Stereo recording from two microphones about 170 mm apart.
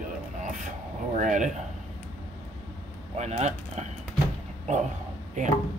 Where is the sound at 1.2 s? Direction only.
45° right (ahead or behind).